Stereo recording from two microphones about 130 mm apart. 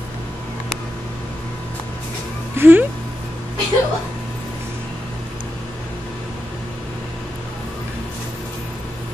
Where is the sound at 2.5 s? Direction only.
15° right (ahead or behind).